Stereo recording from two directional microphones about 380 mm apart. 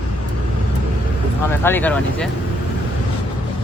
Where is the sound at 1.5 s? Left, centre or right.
Centre.